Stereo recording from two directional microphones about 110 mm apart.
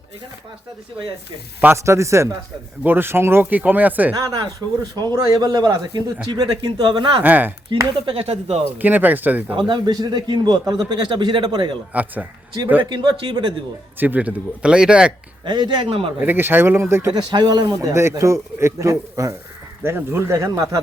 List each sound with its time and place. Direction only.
1.6 s a man's voice: 25° right (ahead or behind)
4.1 s a man's voice: 35° right (ahead or behind)
7.2 s speech: 15° right (ahead or behind)
8.0 s speech: 65° right (ahead or behind)
8.8 s speech: 15° right (ahead or behind)
9.6 s a man's voice: 45° right (ahead or behind)
12.8 s speech: 40° right (ahead or behind)
14.0 s speech: 15° right (ahead or behind)
15.4 s speech: 40° right (ahead or behind); by 16.1 s 60° right (ahead or behind)
16.2 s a man's voice: 20° right (ahead or behind)
17.2 s a man's voice: 40° right (ahead or behind)